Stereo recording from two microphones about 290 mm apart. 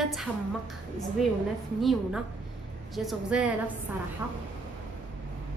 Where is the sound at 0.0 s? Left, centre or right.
Centre.